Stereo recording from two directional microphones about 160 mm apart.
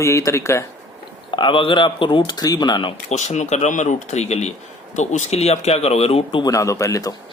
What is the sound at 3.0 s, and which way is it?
Speech, 45° left (ahead or behind).